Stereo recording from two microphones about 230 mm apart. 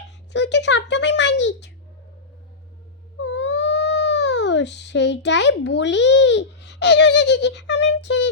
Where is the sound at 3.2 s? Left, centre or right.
Left.